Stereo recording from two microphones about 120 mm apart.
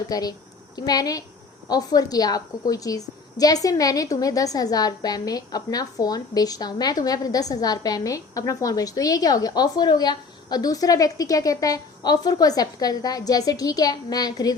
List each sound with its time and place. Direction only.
0.1 s a woman's voice: 30° left (ahead or behind)